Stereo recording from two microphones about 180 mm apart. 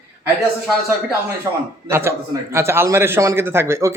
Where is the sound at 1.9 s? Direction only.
15° right (ahead or behind).